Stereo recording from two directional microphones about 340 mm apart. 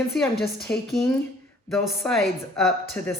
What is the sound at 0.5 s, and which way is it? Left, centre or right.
Speech, left.